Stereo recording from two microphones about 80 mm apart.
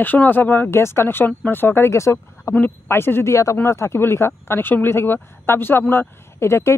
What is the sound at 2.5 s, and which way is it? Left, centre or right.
Speech, left.